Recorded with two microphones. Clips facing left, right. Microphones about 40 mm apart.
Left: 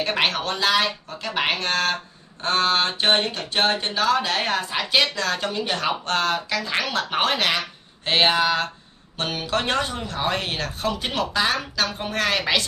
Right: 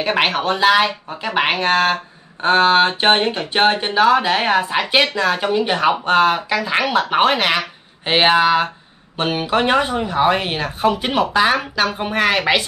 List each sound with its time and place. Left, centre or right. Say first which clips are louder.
0.0 s speech: right 5 dB; centre